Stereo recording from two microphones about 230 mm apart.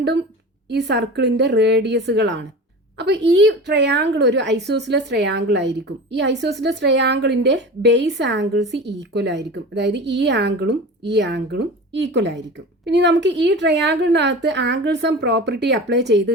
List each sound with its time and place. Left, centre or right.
0.7 s a woman's voice: right